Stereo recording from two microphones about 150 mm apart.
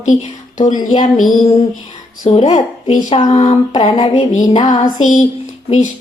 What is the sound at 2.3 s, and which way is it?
Mantra, 45° left (ahead or behind).